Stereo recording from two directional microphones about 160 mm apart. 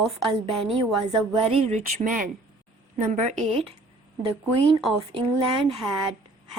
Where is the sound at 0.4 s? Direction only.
35° right (ahead or behind).